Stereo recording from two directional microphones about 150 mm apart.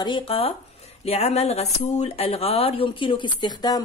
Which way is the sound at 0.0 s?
35° left (ahead or behind).